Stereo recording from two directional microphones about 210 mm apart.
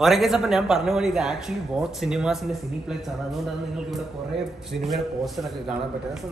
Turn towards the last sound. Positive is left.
turn(degrees=0)  # may be behind; listen again after turning